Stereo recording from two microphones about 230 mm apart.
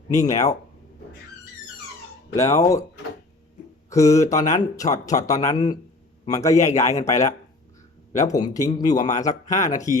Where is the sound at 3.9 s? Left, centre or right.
Centre.